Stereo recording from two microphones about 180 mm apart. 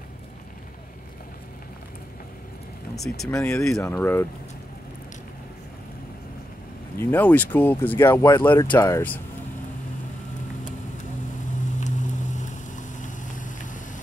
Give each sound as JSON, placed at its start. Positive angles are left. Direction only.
{"t": 3.3, "sound": "speech", "side_deg": 15}
{"t": 7.0, "sound": "speech", "side_deg": 10}
{"t": 11.8, "sound": "vehicle", "side_deg": 45}